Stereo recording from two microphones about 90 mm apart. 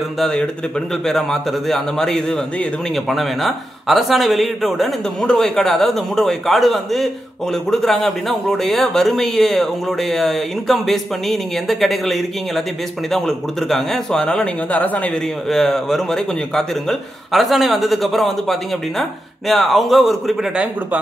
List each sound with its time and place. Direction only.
0.2 s a man's voice: 10° left (ahead or behind)
15.4 s a man's voice: 5° left (ahead or behind)